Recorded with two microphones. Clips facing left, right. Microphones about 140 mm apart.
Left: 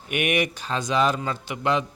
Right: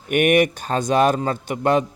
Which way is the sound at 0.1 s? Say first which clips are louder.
Right 8 dB; 50° right (ahead or behind).